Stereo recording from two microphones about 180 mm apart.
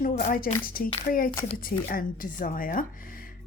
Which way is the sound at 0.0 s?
50° left (ahead or behind).